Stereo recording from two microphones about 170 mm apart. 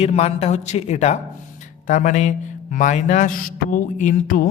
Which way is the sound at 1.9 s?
45° left (ahead or behind).